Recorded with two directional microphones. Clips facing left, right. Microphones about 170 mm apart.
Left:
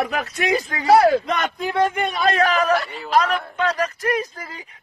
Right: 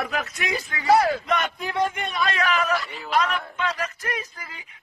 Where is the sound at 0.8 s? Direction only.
65° left (ahead or behind).